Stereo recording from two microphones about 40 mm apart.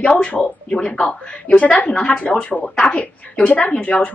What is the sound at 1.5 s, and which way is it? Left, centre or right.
Speech, left.